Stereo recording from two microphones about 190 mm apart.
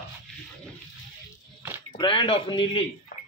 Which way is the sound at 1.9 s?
25° left (ahead or behind).